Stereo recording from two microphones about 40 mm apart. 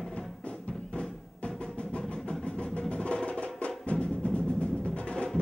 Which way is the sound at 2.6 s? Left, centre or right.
Left.